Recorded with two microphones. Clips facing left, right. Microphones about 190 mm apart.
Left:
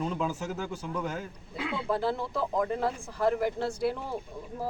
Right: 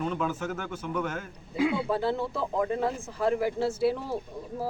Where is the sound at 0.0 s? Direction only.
30° left (ahead or behind).